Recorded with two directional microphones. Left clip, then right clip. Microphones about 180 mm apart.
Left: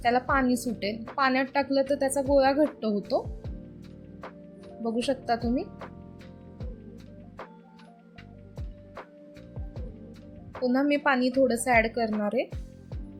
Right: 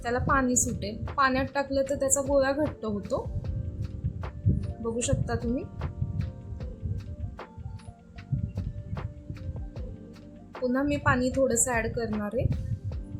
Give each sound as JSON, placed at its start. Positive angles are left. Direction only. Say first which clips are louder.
{"t": 0.0, "sound": "a woman's voice", "louder": "left 2 dB", "side_deg": 5}
{"t": 4.2, "sound": "music", "louder": "right 6 dB", "side_deg": 0}
{"t": 10.5, "sound": "a woman's voice", "louder": "left 3 dB", "side_deg": 5}